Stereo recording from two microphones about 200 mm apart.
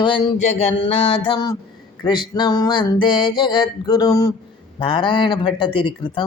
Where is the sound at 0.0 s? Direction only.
25° left (ahead or behind).